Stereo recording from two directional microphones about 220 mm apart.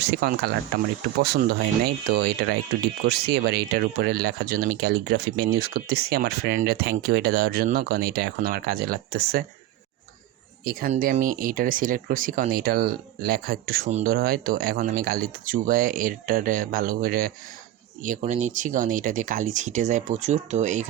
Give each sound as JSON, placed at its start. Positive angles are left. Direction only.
{"t": 0.0, "sound": "speech", "side_deg": -45}
{"t": 10.7, "sound": "speech", "side_deg": -40}